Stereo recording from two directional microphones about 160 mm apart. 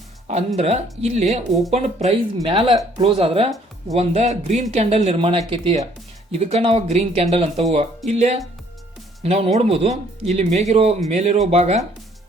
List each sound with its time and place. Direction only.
0.3 s speech: 45° right (ahead or behind)
2.5 s speech: 30° right (ahead or behind)